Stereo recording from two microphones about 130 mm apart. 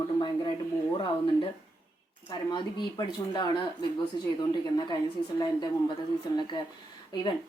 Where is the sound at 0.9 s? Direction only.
45° left (ahead or behind).